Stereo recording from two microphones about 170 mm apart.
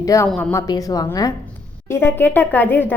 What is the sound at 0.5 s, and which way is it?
A woman's voice, 20° left (ahead or behind).